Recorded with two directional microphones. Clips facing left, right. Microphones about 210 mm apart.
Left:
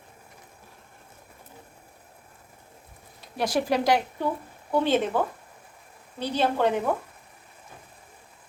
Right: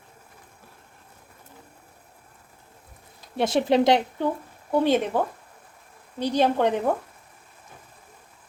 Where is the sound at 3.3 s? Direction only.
25° right (ahead or behind).